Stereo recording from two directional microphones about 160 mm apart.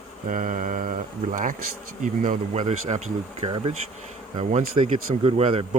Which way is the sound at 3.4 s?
40° right (ahead or behind).